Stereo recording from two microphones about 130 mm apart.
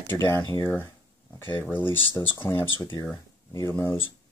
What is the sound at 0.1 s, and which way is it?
Speech, 20° left (ahead or behind).